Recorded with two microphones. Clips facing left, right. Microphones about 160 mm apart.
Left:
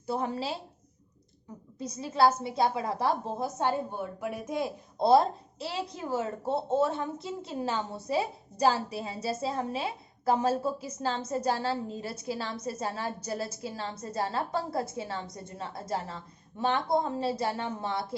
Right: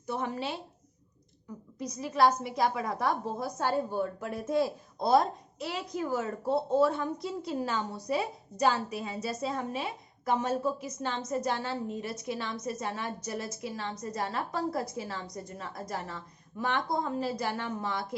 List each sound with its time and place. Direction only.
0.1 s a woman's voice: 30° left (ahead or behind)
1.8 s a woman's voice: 25° left (ahead or behind)